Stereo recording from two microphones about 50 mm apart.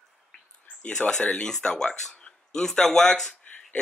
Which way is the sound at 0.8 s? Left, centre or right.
Left.